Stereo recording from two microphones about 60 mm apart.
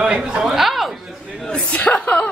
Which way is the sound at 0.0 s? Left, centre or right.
Centre.